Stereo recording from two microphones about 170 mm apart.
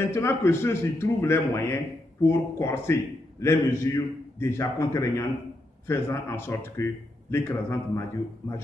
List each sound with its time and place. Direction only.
0.1 s a man's voice: 15° left (ahead or behind)